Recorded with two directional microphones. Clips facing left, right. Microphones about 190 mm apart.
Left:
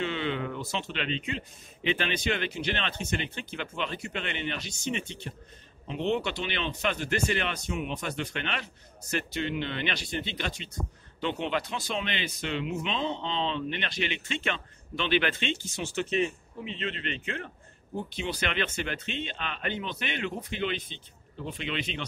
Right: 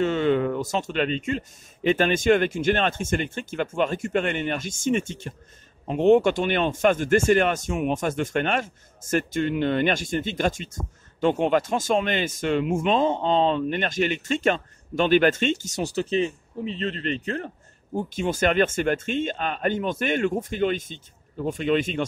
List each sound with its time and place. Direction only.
0.0 s speech: 45° right (ahead or behind)